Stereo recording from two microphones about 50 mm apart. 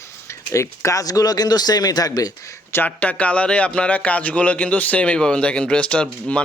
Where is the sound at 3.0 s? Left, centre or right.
Left.